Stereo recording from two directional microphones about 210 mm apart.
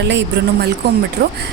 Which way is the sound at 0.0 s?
55° right (ahead or behind).